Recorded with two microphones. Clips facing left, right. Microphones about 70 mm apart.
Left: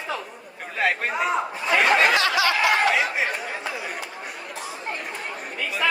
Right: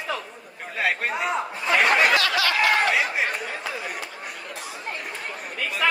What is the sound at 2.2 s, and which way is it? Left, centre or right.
Snicker, left.